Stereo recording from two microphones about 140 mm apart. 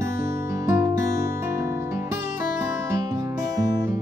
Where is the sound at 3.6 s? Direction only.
25° right (ahead or behind).